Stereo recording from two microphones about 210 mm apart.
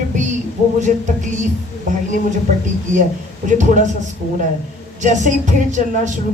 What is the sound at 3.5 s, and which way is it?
Speech, 35° right (ahead or behind).